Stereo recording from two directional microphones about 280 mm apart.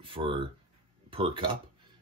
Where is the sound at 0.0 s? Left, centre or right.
Centre.